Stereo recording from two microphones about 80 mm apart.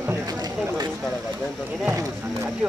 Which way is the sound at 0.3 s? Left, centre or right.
Right.